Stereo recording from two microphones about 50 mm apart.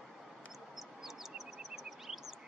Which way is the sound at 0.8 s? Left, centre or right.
Centre.